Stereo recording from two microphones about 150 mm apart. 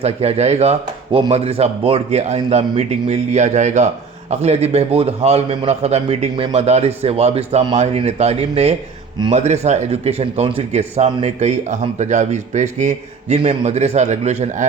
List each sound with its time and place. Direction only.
0.0 s speech: 45° right (ahead or behind)